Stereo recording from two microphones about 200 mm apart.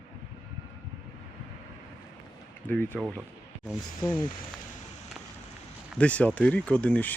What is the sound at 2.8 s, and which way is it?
Speech, 10° right (ahead or behind).